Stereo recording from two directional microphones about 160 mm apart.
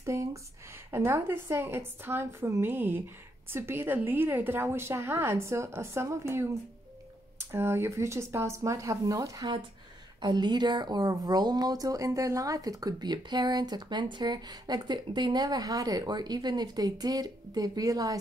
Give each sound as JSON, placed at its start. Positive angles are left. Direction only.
{"t": 0.0, "sound": "a woman's voice", "side_deg": -20}